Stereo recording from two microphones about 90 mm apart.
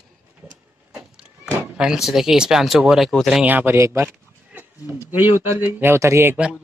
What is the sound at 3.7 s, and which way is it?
Speech, 35° right (ahead or behind).